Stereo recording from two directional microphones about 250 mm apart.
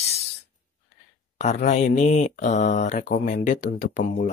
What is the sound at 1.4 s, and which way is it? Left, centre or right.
Speech, left.